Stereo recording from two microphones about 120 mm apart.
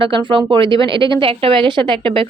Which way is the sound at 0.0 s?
45° right (ahead or behind).